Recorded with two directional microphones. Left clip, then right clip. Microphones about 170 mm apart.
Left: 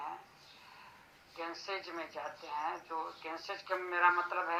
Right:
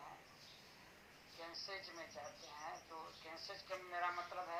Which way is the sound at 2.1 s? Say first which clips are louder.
Left 12 dB; 30° left (ahead or behind).